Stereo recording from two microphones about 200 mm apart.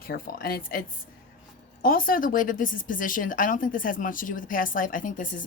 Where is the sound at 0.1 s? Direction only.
50° left (ahead or behind).